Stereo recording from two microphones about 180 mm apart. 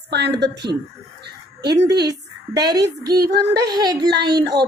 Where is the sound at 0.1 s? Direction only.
70° right (ahead or behind).